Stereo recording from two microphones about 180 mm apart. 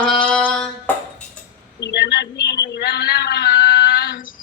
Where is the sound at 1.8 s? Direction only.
70° left (ahead or behind); by 4.3 s 50° left (ahead or behind).